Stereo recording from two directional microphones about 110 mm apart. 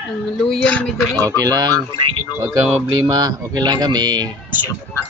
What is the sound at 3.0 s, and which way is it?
Speech, 35° right (ahead or behind).